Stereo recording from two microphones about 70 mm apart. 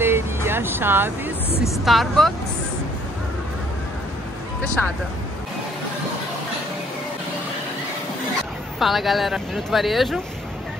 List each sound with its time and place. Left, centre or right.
0.0 s vehicle: right
1.9 s speech: centre
4.8 s speech: left
8.7 s speech: centre